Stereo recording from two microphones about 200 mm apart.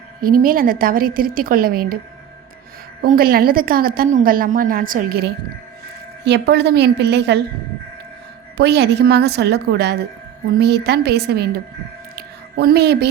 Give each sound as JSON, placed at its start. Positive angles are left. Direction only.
{"t": 0.3, "sound": "a woman's voice", "side_deg": -45}
{"t": 3.0, "sound": "a woman's voice", "side_deg": -50}
{"t": 8.5, "sound": "a woman's voice", "side_deg": -55}
{"t": 12.1, "sound": "music", "side_deg": -55}